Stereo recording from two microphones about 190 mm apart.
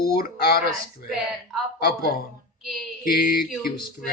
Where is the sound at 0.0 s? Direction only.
55° left (ahead or behind).